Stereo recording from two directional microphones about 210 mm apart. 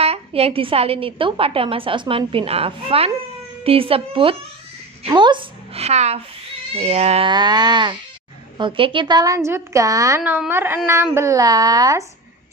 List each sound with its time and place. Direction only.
0.0 s a woman's voice: 30° right (ahead or behind)